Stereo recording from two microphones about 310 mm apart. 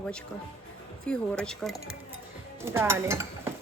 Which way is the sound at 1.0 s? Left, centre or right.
Centre.